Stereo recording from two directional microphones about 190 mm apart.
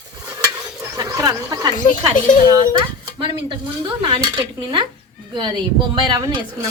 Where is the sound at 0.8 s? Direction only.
15° right (ahead or behind).